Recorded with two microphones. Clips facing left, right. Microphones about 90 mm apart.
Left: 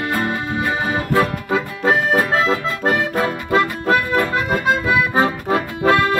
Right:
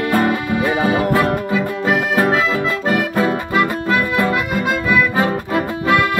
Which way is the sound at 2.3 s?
35° left (ahead or behind).